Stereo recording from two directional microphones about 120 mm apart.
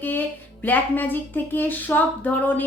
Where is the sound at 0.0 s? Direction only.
15° left (ahead or behind).